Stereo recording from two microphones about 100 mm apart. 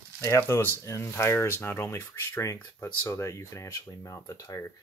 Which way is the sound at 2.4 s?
30° left (ahead or behind).